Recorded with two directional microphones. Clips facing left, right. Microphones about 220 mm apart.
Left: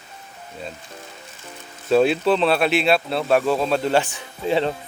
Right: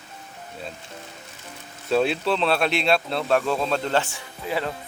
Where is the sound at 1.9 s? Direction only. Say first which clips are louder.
Left 5 dB; centre (ahead or behind); by 4.7 s 25° left (ahead or behind).